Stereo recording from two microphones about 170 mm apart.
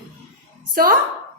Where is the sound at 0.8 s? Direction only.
60° right (ahead or behind).